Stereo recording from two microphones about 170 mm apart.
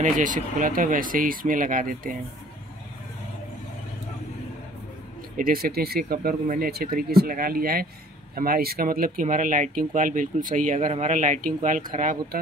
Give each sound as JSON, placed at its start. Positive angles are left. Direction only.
{"t": 0.0, "sound": "speech", "side_deg": -50}
{"t": 5.4, "sound": "speech", "side_deg": -60}